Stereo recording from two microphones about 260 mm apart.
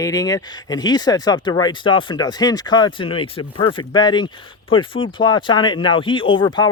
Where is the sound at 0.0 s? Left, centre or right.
Centre.